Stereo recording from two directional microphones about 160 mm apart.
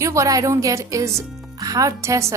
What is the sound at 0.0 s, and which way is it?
Speech, 20° right (ahead or behind).